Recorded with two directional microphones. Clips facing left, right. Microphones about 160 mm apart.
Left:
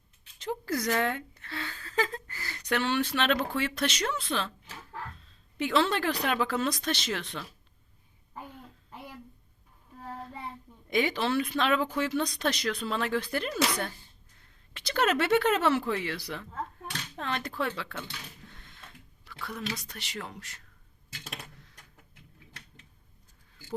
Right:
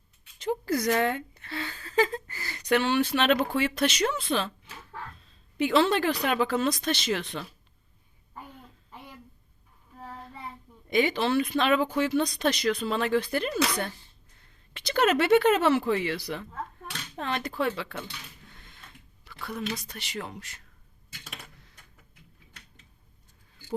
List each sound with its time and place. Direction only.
0.3 s a sound: 10° right (ahead or behind)
2.3 s speech: 5° right (ahead or behind)
5.5 s speech: 10° right (ahead or behind)
10.8 s speech: centre (ahead or behind)
19.2 s speech: 5° right (ahead or behind)